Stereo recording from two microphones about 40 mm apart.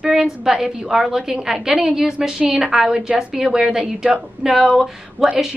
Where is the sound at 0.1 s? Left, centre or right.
Centre.